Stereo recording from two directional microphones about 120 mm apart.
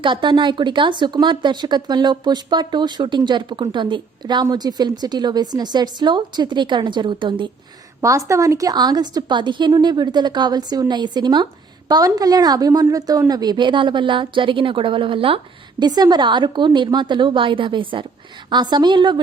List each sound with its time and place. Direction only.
0.0 s speech: 40° right (ahead or behind)
8.0 s speech: 25° right (ahead or behind); by 15.4 s 50° right (ahead or behind)
15.8 s speech: 35° right (ahead or behind)